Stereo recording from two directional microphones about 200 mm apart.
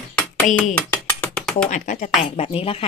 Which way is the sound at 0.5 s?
5° left (ahead or behind).